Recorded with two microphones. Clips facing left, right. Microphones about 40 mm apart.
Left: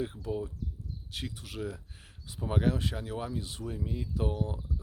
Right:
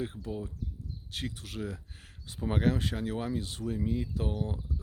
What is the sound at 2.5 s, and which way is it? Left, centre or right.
Speech, centre.